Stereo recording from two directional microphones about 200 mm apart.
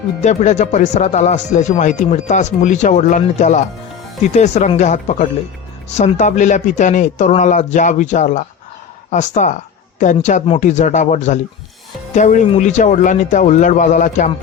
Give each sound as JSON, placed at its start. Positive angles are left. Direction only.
{"t": 0.2, "sound": "speech", "side_deg": 35}